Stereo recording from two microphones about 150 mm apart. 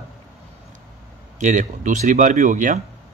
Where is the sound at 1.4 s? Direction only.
55° right (ahead or behind).